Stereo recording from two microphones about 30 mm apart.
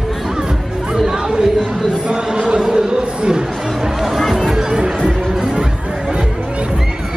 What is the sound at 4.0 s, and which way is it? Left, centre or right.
Music, centre.